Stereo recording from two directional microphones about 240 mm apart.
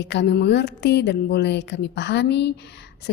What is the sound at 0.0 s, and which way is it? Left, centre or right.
A woman's voice, left.